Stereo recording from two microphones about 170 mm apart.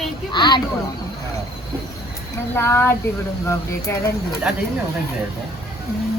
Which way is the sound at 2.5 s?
15° left (ahead or behind).